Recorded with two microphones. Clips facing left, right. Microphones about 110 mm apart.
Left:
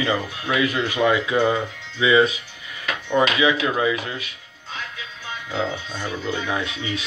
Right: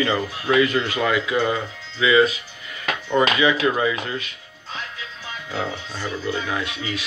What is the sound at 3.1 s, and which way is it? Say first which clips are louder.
Speech: even; 5° left (ahead or behind).